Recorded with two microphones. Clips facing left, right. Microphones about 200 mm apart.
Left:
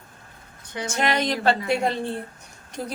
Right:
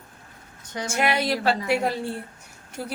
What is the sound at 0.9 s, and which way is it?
Speech, 10° right (ahead or behind).